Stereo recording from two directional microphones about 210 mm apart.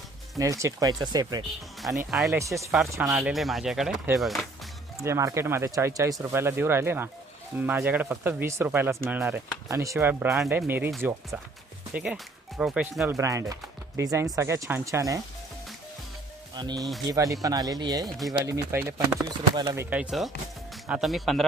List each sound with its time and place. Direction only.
0.3 s speech: 15° right (ahead or behind)
2.0 s speech: centre (ahead or behind)
5.0 s speech: 15° right (ahead or behind)
11.9 s speech: 5° right (ahead or behind)
16.6 s speech: 20° right (ahead or behind)
18.0 s speech: centre (ahead or behind)
18.3 s speech: 15° right (ahead or behind); by 21.4 s centre (ahead or behind)